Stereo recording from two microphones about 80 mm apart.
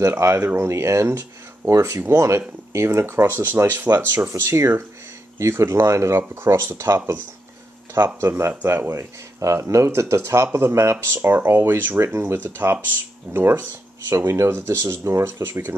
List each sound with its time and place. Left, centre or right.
0.0 s speech: right
3.9 s speech: right